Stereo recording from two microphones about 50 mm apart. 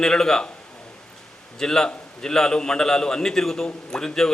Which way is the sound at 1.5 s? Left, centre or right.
Centre.